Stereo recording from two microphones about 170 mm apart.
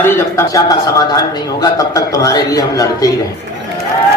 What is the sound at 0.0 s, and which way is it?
A man's voice, 15° left (ahead or behind).